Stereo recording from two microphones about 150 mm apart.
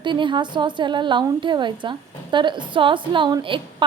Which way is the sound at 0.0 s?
30° right (ahead or behind).